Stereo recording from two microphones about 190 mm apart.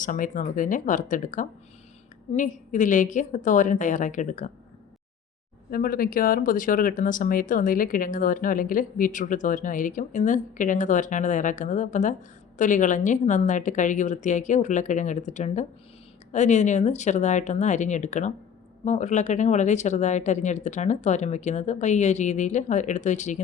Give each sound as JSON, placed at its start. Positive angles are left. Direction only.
{"t": 0.0, "sound": "speech", "side_deg": 45}
{"t": 5.7, "sound": "speech", "side_deg": 50}